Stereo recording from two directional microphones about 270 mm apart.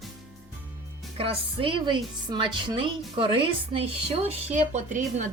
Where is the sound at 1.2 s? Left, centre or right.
Centre.